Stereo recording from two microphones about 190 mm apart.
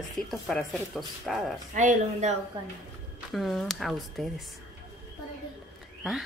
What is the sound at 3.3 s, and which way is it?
Speech, centre (ahead or behind).